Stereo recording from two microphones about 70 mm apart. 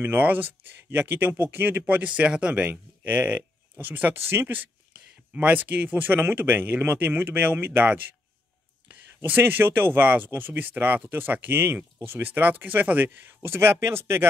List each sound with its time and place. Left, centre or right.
0.0 s speech: right
5.3 s speech: right